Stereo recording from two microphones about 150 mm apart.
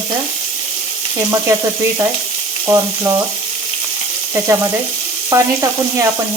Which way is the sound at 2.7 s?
20° right (ahead or behind).